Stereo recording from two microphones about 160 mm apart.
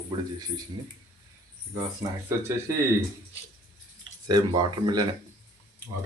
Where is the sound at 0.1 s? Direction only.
25° right (ahead or behind).